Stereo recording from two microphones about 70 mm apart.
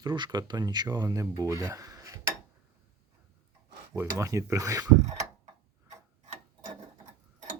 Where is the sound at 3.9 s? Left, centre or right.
Right.